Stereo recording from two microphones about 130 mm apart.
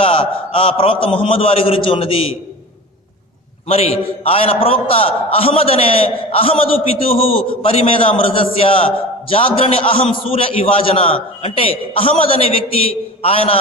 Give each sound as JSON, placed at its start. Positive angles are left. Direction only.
{"t": 0.0, "sound": "a man's voice", "side_deg": 45}
{"t": 3.6, "sound": "a man's voice", "side_deg": 50}